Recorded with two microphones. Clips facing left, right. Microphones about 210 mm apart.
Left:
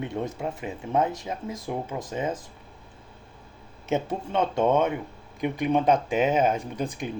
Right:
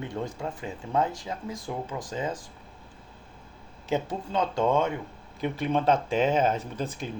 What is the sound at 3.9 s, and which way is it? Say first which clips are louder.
Speech: left 2 dB; 25° left (ahead or behind).